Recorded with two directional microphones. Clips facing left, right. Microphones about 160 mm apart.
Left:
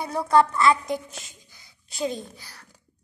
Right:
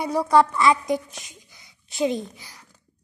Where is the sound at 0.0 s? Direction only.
10° right (ahead or behind).